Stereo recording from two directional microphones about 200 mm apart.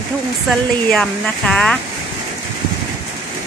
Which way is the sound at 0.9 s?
5° left (ahead or behind).